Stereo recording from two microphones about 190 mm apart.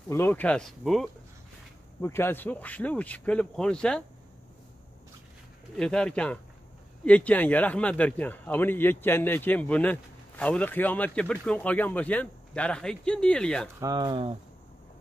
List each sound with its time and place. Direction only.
0.1 s speech: 10° left (ahead or behind)
2.0 s speech: 15° left (ahead or behind)
5.8 s speech: 5° left (ahead or behind)
13.7 s speech: 20° right (ahead or behind)